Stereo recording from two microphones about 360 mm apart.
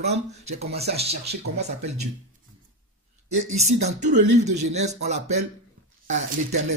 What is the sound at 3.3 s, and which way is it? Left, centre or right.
A man's voice, centre.